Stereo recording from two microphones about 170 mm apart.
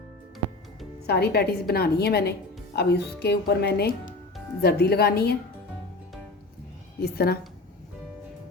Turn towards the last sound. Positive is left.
turn(degrees=65)  # may be behind; listen again after turning